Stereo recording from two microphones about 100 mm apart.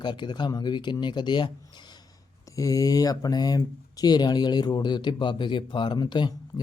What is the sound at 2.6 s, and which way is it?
Speech, 35° left (ahead or behind).